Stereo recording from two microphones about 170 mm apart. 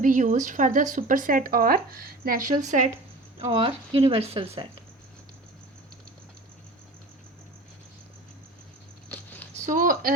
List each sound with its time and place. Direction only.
0.0 s speech: 50° right (ahead or behind)
3.3 s speech: 35° right (ahead or behind)
9.0 s a sound: 10° left (ahead or behind)
9.6 s speech: 50° right (ahead or behind)